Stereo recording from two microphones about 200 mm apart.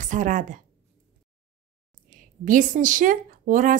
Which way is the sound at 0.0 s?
40° right (ahead or behind).